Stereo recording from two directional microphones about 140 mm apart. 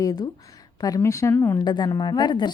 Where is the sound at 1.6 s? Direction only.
30° left (ahead or behind).